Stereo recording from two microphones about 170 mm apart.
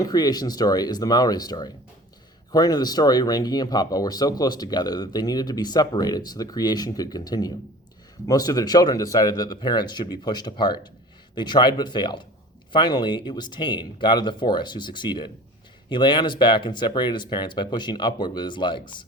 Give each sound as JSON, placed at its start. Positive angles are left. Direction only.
{"t": 0.0, "sound": "speech", "side_deg": 25}